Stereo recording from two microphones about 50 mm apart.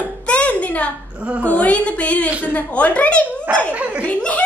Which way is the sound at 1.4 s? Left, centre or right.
Left.